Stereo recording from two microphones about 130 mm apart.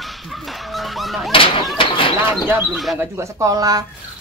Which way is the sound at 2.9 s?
20° right (ahead or behind).